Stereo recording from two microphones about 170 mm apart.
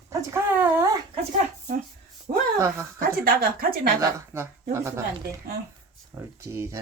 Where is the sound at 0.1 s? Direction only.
15° right (ahead or behind).